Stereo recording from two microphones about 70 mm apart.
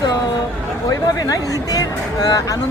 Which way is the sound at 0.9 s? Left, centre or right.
Left.